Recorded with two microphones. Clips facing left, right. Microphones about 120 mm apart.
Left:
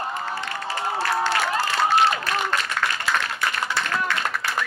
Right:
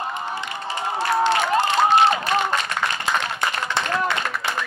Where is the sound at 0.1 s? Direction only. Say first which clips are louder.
Even; 20° right (ahead or behind).